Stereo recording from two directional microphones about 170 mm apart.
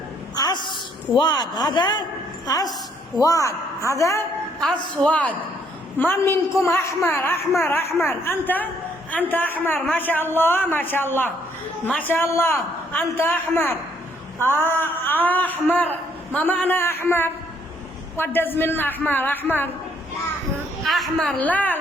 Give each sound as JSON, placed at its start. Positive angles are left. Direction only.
{"t": 0.3, "sound": "a sound", "side_deg": 25}
{"t": 1.2, "sound": "a man's voice", "side_deg": 25}
{"t": 3.2, "sound": "a man's voice", "side_deg": 20}
{"t": 5.0, "sound": "a man's voice", "side_deg": 10}
{"t": 14.5, "sound": "a man's voice", "side_deg": 10}
{"t": 20.8, "sound": "a woman's voice", "side_deg": 0}